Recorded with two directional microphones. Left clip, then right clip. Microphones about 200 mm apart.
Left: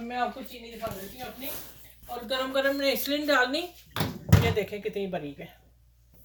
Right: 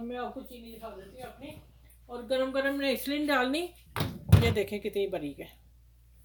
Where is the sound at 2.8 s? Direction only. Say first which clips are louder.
Left 3 dB; 40° right (ahead or behind).